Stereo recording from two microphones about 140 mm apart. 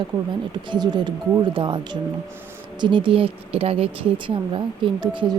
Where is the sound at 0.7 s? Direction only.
30° right (ahead or behind).